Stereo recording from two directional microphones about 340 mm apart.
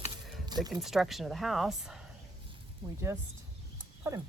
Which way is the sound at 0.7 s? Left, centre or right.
Centre.